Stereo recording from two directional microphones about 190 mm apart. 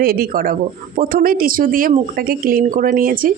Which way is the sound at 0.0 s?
50° right (ahead or behind).